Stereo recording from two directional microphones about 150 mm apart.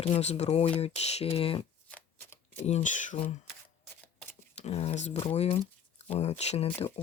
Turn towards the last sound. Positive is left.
turn(degrees=45)  # may be behind; listen again after turning